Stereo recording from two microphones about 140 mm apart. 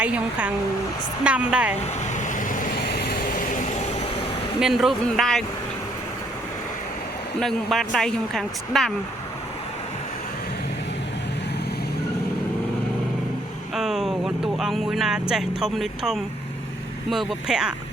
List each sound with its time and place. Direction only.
0.0 s speech: 10° right (ahead or behind)
2.1 s vehicle: 65° left (ahead or behind)
3.1 s vehicle: 80° left
4.6 s speech: centre (ahead or behind)
7.3 s speech: centre (ahead or behind)
13.7 s speech: 5° right (ahead or behind)